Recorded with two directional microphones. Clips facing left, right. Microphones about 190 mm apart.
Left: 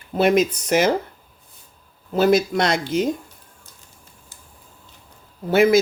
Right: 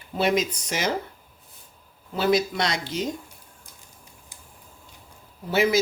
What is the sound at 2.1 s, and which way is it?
Speech, 45° left (ahead or behind).